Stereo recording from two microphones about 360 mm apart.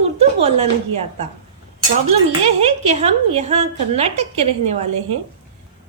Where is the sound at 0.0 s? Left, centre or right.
Centre.